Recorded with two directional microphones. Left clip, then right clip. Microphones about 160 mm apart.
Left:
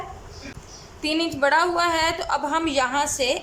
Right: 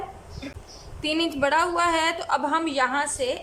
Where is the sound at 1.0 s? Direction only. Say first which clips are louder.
Left 2 dB; centre (ahead or behind).